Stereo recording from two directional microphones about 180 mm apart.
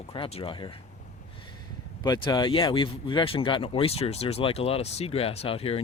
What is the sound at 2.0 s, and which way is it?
Speech, 25° left (ahead or behind).